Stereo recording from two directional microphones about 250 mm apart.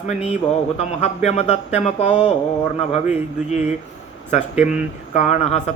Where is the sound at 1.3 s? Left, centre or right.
Left.